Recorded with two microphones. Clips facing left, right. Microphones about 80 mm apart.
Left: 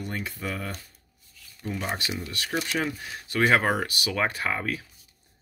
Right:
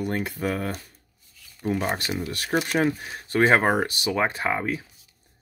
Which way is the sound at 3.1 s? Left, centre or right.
Right.